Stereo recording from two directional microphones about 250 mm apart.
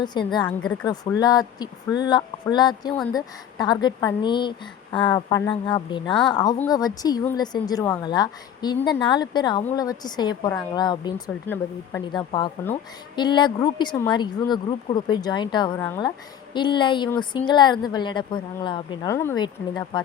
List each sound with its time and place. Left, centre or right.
0.0 s a woman's voice: centre
0.4 s a woman's voice: centre
1.2 s a woman's voice: centre